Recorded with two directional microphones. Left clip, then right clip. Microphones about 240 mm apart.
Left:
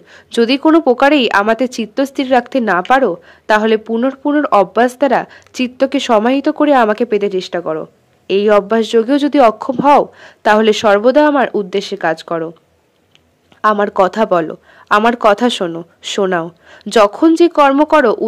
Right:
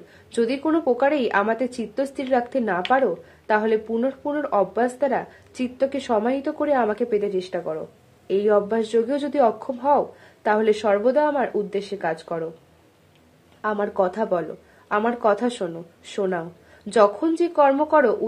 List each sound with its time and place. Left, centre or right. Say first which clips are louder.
0.3 s speech: left 11 dB; left
13.6 s speech: left 11 dB; left